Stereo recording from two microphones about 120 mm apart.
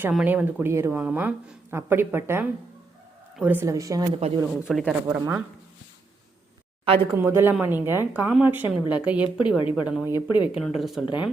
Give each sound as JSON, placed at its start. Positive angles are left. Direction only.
{"t": 0.3, "sound": "a woman's voice", "side_deg": -20}
{"t": 3.7, "sound": "a woman's voice", "side_deg": -25}
{"t": 4.2, "sound": "speech", "side_deg": -55}
{"t": 4.7, "sound": "speech", "side_deg": 0}
{"t": 5.0, "sound": "a woman's voice", "side_deg": -20}
{"t": 6.8, "sound": "speech", "side_deg": -50}
{"t": 7.2, "sound": "a woman's voice", "side_deg": -20}
{"t": 10.2, "sound": "speech", "side_deg": 40}
{"t": 10.8, "sound": "speech", "side_deg": 0}
{"t": 11.0, "sound": "speech", "side_deg": 40}